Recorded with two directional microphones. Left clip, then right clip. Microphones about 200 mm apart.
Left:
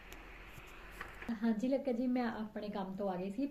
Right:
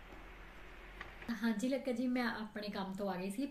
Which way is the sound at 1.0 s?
15° right (ahead or behind).